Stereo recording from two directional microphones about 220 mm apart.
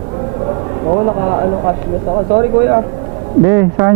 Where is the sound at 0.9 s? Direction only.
25° right (ahead or behind).